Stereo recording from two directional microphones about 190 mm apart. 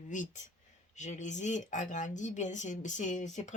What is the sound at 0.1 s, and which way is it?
Speech, 40° left (ahead or behind).